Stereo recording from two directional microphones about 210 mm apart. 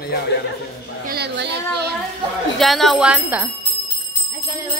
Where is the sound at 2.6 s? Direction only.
Centre (ahead or behind).